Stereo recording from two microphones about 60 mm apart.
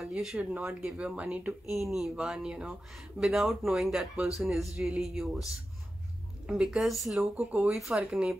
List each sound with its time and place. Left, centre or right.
0.0 s speech: centre
0.4 s speech: right
1.7 s speech: centre
2.1 s speech: centre
6.5 s speech: centre
7.3 s speech: right